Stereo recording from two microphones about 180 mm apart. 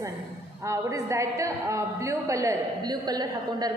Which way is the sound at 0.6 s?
15° right (ahead or behind).